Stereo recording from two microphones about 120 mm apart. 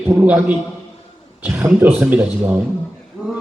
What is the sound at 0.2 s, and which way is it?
Speech, 10° right (ahead or behind).